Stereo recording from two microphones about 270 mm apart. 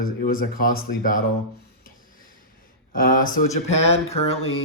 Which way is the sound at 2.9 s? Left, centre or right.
Left.